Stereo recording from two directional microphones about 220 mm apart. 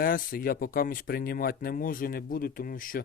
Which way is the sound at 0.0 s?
40° left (ahead or behind).